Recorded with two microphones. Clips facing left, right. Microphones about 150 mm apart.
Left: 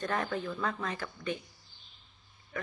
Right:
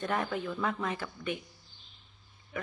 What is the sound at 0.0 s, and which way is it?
Speech, 5° right (ahead or behind).